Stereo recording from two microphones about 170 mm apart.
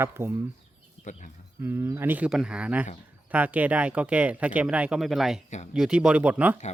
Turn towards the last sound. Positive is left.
turn(degrees=-10)  # may be behind; listen again after turning